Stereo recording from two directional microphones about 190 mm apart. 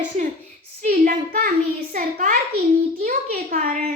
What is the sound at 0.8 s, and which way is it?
A woman's voice, 45° right (ahead or behind).